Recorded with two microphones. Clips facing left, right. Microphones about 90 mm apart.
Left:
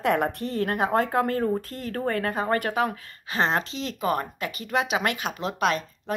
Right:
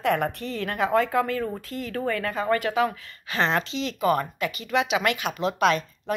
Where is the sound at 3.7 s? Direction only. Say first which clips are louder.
Right 3 dB; 85° right.